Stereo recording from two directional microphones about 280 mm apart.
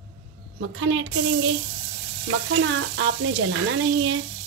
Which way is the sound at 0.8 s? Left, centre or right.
Right.